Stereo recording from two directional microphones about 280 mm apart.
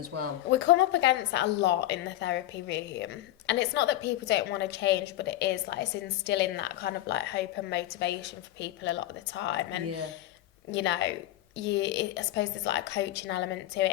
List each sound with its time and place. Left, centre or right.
0.1 s speech: right
0.5 s a woman's voice: left